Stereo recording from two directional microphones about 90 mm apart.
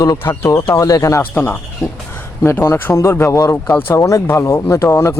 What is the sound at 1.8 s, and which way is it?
Speech, 40° left (ahead or behind).